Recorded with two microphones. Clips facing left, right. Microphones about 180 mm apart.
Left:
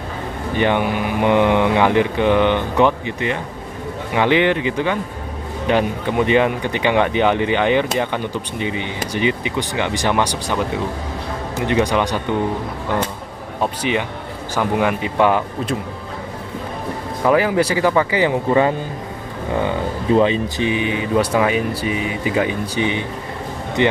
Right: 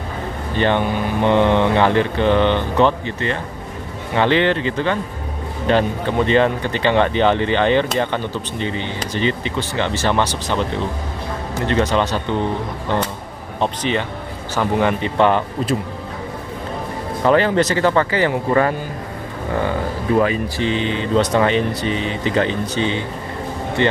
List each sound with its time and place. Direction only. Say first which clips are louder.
0.6 s speech: even; 10° left (ahead or behind)
13.6 s speech: even; 10° left (ahead or behind)
17.2 s speech: right 1 dB; 10° left (ahead or behind)
20.2 s speech: left 1 dB; 20° left (ahead or behind)